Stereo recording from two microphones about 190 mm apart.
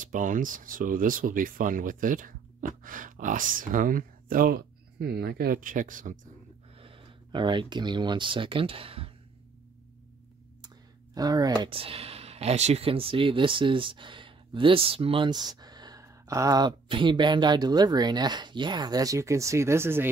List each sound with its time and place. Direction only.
0.0 s speech: 45° right (ahead or behind)
6.8 s speech: 30° right (ahead or behind)
11.1 s speech: 20° right (ahead or behind)